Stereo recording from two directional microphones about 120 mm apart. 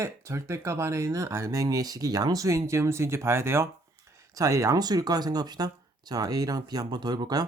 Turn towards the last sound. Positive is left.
turn(degrees=-35)  # may be behind; listen again after turning